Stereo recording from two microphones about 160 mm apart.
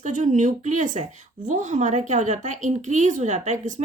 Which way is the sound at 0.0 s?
50° right (ahead or behind).